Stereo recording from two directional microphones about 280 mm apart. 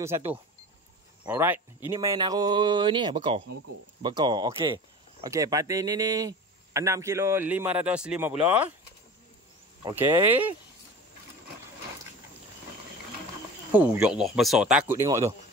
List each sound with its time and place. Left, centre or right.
1.2 s speech: centre
9.8 s speech: centre
13.7 s speech: centre